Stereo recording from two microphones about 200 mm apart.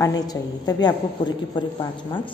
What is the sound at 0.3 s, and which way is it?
A woman's voice, 20° left (ahead or behind).